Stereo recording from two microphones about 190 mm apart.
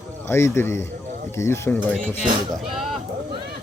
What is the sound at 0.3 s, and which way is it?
A man's voice, 15° left (ahead or behind).